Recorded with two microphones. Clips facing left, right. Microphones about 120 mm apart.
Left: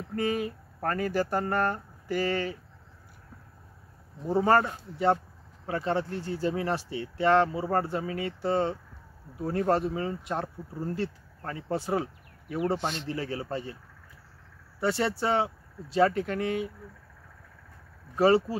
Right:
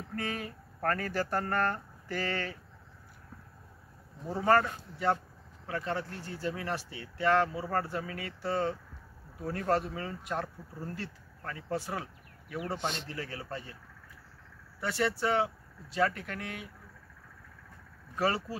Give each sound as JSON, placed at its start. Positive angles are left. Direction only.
{"t": 0.1, "sound": "speech", "side_deg": 15}
{"t": 4.4, "sound": "speech", "side_deg": 25}
{"t": 14.8, "sound": "speech", "side_deg": 30}
{"t": 18.1, "sound": "speech", "side_deg": 25}